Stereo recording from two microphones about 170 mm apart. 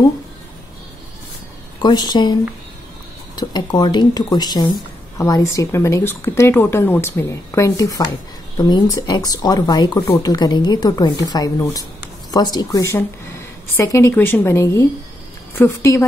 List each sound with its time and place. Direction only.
1.8 s a woman's voice: 25° left (ahead or behind)
3.3 s a woman's voice: 25° left (ahead or behind)